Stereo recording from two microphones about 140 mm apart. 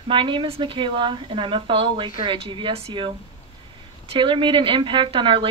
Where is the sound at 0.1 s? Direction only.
35° right (ahead or behind).